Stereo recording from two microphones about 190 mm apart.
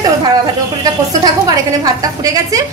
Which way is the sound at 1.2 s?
20° right (ahead or behind).